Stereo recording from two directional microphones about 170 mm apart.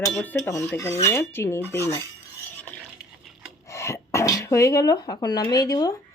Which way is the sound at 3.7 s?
15° left (ahead or behind).